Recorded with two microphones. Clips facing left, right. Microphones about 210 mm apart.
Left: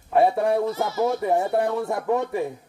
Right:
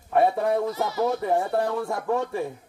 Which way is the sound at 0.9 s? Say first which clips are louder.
Left 1 dB; 20° left (ahead or behind).